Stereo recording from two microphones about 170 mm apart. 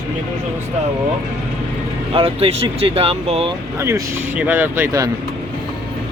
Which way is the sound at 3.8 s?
15° right (ahead or behind).